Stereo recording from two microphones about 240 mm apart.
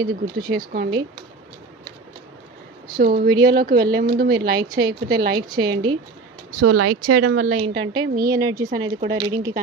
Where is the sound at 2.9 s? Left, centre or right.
Right.